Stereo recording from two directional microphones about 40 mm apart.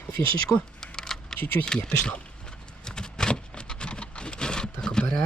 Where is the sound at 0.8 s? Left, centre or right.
Centre.